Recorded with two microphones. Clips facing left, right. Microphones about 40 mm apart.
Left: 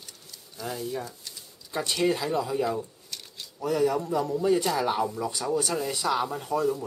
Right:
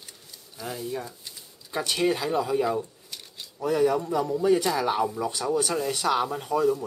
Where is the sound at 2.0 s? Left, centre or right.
Centre.